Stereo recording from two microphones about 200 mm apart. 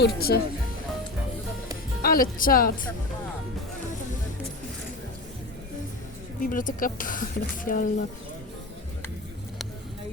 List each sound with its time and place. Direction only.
0.0 s a woman's voice: 50° left (ahead or behind)
2.0 s a woman's voice: 45° left (ahead or behind)
6.4 s a woman's voice: 45° left (ahead or behind)